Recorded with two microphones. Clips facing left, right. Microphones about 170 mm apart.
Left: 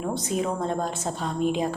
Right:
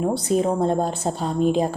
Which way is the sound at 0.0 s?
35° right (ahead or behind).